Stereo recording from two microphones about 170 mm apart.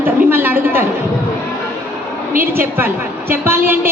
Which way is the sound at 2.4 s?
15° right (ahead or behind).